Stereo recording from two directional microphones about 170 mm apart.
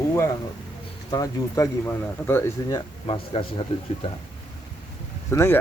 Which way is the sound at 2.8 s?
30° left (ahead or behind).